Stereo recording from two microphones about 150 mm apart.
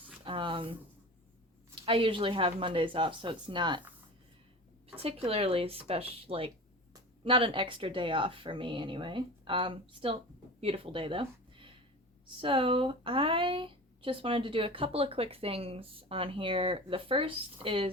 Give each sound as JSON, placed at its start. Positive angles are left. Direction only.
{"t": 0.3, "sound": "a sound", "side_deg": -35}
{"t": 1.8, "sound": "speech", "side_deg": -35}
{"t": 5.0, "sound": "speech", "side_deg": -40}